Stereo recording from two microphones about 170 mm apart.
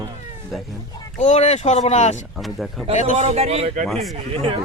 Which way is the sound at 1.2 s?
40° left (ahead or behind).